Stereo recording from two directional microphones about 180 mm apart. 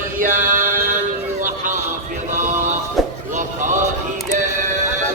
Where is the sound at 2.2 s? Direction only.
45° right (ahead or behind).